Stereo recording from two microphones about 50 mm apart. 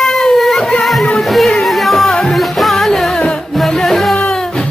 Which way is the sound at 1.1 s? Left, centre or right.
Centre.